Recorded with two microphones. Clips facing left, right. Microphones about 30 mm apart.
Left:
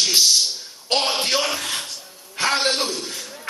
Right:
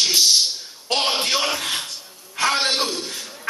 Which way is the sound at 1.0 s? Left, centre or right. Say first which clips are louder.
Right 1 dB; centre.